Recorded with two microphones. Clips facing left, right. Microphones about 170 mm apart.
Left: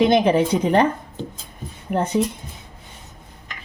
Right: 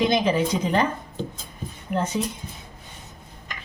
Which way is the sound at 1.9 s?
60° left (ahead or behind).